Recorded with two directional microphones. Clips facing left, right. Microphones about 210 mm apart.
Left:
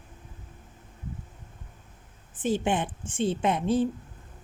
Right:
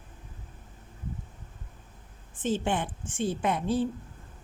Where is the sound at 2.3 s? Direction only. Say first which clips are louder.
Left 2 dB; 10° left (ahead or behind).